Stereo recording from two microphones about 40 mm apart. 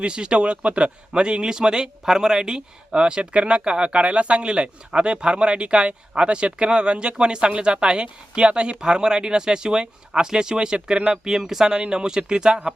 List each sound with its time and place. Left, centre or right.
0.0 s speech: right